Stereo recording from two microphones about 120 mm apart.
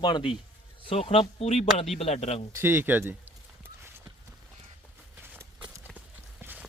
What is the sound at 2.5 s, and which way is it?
Speech, 20° right (ahead or behind).